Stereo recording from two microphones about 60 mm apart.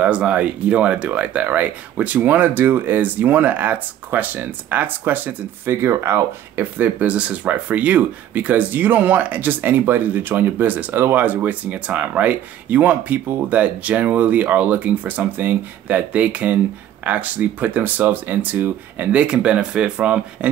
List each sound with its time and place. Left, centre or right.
0.0 s speech: right
6.5 s speech: right